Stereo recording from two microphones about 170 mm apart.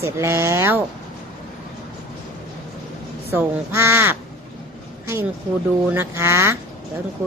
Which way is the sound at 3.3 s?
15° right (ahead or behind).